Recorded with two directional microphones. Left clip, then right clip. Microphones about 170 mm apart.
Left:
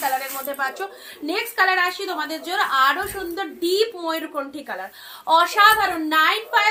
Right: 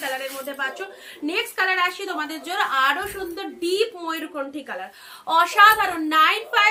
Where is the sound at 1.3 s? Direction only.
20° right (ahead or behind).